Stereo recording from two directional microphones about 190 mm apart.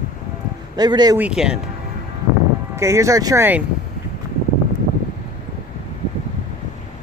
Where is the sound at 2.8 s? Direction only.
15° right (ahead or behind).